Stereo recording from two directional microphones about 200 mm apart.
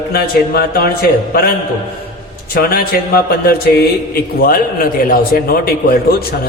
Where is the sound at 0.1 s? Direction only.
50° left (ahead or behind).